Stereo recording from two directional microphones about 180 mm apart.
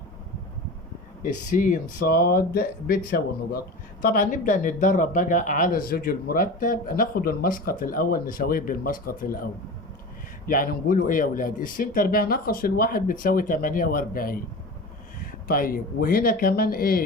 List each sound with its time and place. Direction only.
1.2 s speech: 45° left (ahead or behind)
10.5 s speech: 50° left (ahead or behind)